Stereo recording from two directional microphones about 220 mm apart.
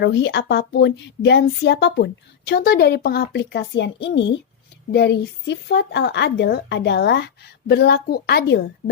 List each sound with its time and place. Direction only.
0.0 s speech: 50° left (ahead or behind)